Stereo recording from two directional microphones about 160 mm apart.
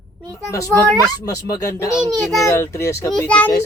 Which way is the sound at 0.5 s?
20° left (ahead or behind).